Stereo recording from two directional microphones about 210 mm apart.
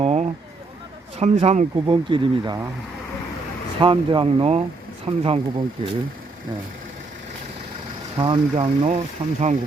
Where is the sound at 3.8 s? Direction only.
25° right (ahead or behind).